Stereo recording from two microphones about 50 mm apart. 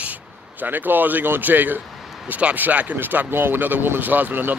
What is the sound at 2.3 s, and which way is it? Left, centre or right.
Speech, right.